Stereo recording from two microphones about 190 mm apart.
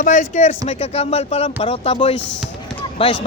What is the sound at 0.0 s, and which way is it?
Speech, 40° left (ahead or behind).